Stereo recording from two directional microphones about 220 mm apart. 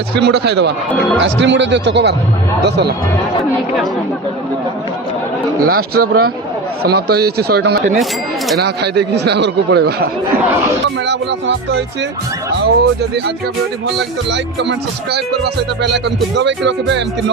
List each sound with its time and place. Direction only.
0.1 s speech: 50° right (ahead or behind)
5.6 s speech: 40° right (ahead or behind)